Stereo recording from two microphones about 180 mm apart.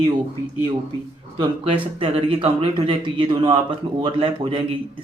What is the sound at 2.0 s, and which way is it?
A man's voice, 30° right (ahead or behind).